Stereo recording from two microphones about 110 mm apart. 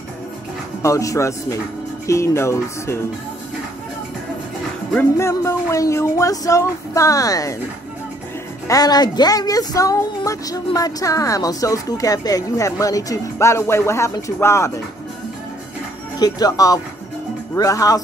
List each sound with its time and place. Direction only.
0.8 s speech: 30° left (ahead or behind)
5.1 s speech: 30° left (ahead or behind)
8.6 s a woman's voice: 35° left (ahead or behind)
16.2 s a woman's voice: 35° left (ahead or behind)